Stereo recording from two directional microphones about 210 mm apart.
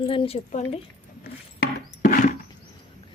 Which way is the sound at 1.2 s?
50° left (ahead or behind).